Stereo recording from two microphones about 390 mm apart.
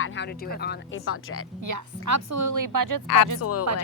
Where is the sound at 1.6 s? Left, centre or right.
Right.